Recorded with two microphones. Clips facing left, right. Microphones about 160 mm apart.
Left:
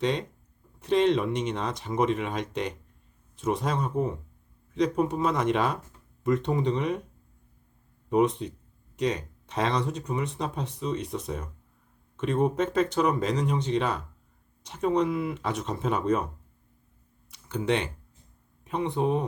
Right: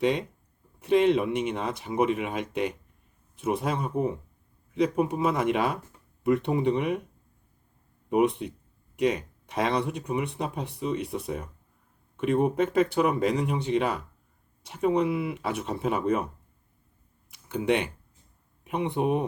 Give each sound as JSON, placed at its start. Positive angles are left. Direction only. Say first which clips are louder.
{"t": 0.0, "sound": "speech", "louder": "right 2 dB", "side_deg": -10}
{"t": 8.1, "sound": "speech", "louder": "even", "side_deg": -10}
{"t": 17.3, "sound": "speech", "louder": "right 1 dB", "side_deg": -10}